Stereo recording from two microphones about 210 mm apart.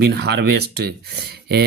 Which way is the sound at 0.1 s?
50° right (ahead or behind).